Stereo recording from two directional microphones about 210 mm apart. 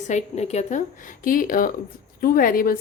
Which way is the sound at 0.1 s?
30° left (ahead or behind).